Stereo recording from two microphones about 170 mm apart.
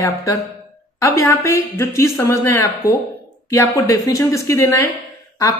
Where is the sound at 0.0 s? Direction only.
20° left (ahead or behind).